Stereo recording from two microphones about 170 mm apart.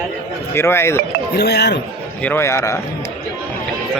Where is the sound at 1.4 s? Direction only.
80° left.